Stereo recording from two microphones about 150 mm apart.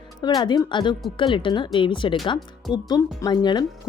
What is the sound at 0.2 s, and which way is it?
Speech, 30° left (ahead or behind).